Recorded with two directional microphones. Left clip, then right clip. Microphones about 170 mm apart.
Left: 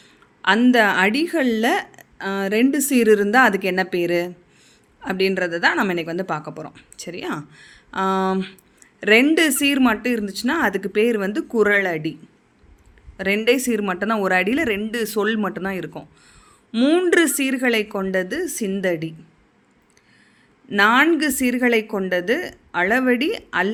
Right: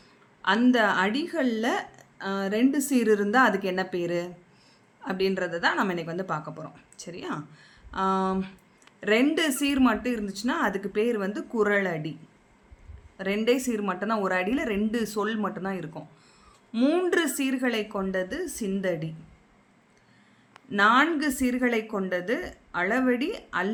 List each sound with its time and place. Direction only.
0.7 s a woman's voice: 30° left (ahead or behind)
13.1 s a woman's voice: 30° left (ahead or behind)
20.7 s speech: 30° left (ahead or behind)